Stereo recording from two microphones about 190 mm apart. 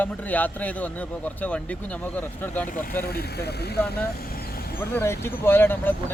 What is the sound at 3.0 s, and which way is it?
Speech, 55° left (ahead or behind).